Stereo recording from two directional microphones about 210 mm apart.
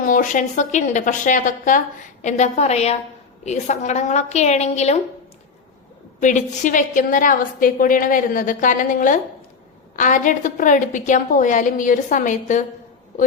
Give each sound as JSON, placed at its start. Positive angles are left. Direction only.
{"t": 0.0, "sound": "a woman's voice", "side_deg": 40}
{"t": 6.1, "sound": "a woman's voice", "side_deg": 35}